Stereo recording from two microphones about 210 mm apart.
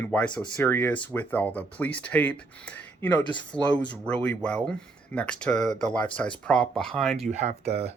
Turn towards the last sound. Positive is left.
turn(degrees=-30)  # may be behind; listen again after turning